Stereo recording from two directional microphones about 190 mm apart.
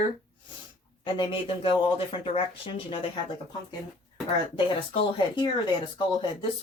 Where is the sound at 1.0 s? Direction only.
25° left (ahead or behind).